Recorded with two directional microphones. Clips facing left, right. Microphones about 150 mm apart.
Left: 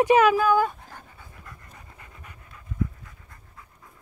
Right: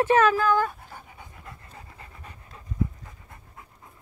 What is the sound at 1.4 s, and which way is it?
Pant, 30° right (ahead or behind).